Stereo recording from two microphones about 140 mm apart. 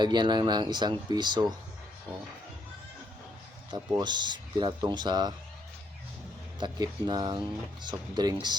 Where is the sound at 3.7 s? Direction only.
30° right (ahead or behind).